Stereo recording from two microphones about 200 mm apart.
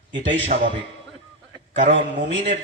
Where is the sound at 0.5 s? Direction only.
40° right (ahead or behind).